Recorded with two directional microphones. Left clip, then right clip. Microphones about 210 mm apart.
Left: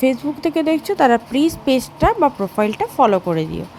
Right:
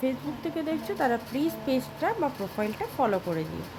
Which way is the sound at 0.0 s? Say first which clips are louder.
Left 12 dB; 35° left (ahead or behind).